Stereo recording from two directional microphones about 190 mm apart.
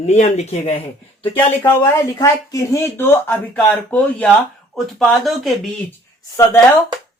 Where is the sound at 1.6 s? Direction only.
15° left (ahead or behind).